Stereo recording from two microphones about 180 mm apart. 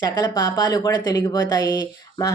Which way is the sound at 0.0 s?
20° left (ahead or behind).